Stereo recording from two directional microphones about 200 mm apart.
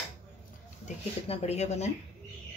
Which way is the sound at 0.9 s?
30° left (ahead or behind).